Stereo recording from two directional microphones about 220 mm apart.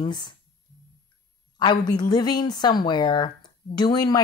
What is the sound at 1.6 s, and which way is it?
Speech, 20° left (ahead or behind).